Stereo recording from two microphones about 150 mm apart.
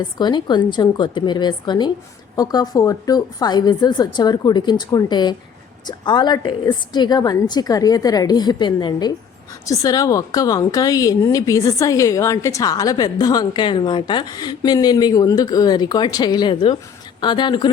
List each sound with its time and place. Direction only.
0.2 s a woman's voice: 30° left (ahead or behind)